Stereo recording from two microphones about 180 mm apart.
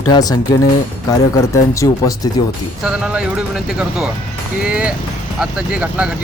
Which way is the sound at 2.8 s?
5° right (ahead or behind).